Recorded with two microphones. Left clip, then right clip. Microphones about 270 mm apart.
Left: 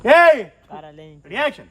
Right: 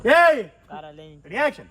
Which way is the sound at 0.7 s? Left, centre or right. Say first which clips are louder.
Left 1 dB; left.